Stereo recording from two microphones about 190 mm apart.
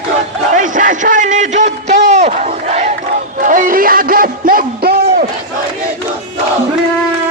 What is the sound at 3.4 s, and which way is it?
Music, 45° right (ahead or behind).